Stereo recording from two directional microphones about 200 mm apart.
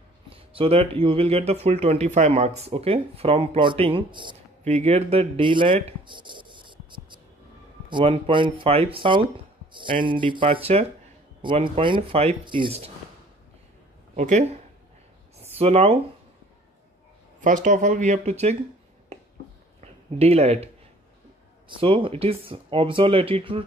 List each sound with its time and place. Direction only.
0.3 s speech: 30° right (ahead or behind)
14.1 s speech: 35° right (ahead or behind)
15.6 s speech: 30° right (ahead or behind)
17.4 s speech: 40° right (ahead or behind)
19.8 s speech: 30° right (ahead or behind)